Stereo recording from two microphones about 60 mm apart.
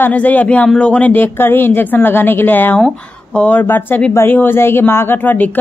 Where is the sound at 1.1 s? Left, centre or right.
Left.